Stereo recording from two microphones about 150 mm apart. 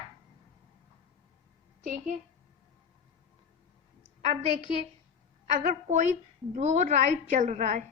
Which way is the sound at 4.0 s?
45° right (ahead or behind).